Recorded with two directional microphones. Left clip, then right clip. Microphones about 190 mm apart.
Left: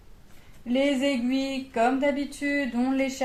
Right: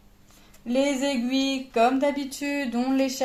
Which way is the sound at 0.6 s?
45° right (ahead or behind).